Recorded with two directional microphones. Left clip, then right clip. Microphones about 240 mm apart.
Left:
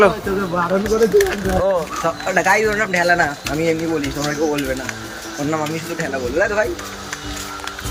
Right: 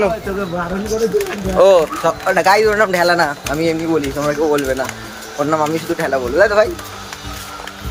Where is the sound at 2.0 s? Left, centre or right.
Centre.